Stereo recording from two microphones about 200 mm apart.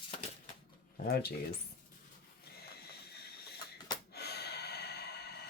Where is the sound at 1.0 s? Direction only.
50° left (ahead or behind).